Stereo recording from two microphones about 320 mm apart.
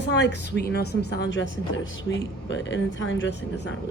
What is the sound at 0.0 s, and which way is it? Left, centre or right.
A woman's voice, left.